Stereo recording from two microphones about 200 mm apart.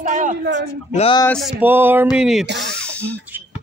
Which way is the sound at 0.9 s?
30° left (ahead or behind).